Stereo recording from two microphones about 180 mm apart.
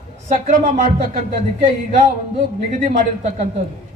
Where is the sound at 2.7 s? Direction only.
45° right (ahead or behind).